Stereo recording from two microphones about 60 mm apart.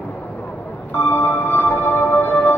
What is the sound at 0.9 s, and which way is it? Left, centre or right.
Music, left.